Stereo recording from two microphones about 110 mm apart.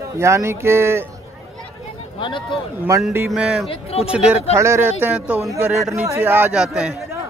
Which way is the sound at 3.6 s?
55° left (ahead or behind).